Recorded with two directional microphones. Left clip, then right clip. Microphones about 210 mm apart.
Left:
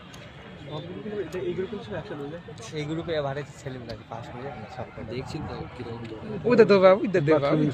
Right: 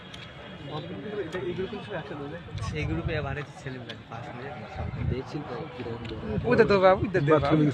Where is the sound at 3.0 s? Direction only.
25° left (ahead or behind).